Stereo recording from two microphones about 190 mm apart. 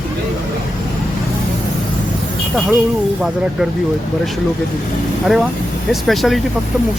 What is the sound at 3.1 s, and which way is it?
Speech, 5° right (ahead or behind).